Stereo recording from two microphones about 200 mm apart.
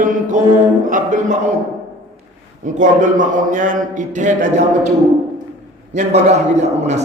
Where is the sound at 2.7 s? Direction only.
40° right (ahead or behind).